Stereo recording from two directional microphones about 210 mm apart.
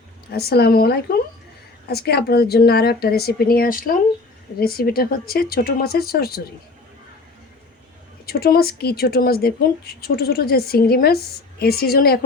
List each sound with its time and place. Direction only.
0.3 s speech: 50° left (ahead or behind)
8.3 s speech: 45° left (ahead or behind)